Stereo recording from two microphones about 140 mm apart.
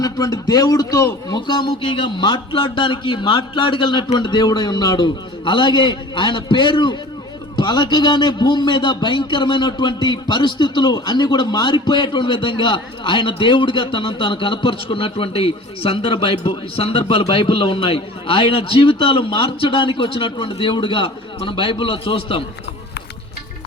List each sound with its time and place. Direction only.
0.0 s a man's voice: 25° left (ahead or behind)